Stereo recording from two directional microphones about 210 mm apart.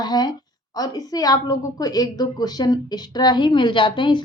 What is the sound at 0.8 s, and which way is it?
A woman's voice, 15° left (ahead or behind).